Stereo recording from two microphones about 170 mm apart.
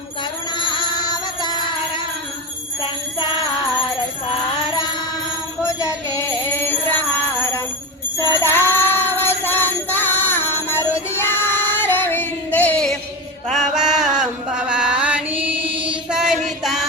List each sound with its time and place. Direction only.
0.6 s music: 30° left (ahead or behind)
5.6 s music: 20° left (ahead or behind)
8.4 s music: 15° left (ahead or behind)
11.2 s female singing: 15° left (ahead or behind)
13.5 s a sound: centre (ahead or behind)
14.7 s chant: 5° right (ahead or behind)